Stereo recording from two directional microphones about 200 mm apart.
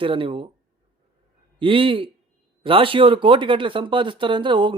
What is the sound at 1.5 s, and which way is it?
Speech, 25° right (ahead or behind).